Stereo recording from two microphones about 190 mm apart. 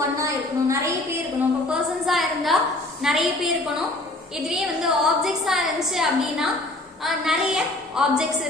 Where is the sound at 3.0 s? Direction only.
Centre (ahead or behind).